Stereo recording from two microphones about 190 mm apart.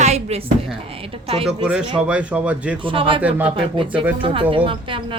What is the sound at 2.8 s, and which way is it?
A woman's voice, 25° right (ahead or behind).